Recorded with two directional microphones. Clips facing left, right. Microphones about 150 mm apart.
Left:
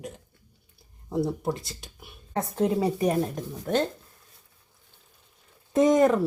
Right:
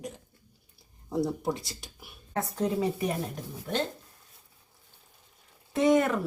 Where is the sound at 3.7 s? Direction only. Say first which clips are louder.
Left 6 dB; 50° left (ahead or behind).